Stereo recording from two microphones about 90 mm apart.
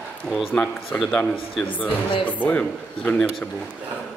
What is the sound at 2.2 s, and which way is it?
Speech, 15° left (ahead or behind).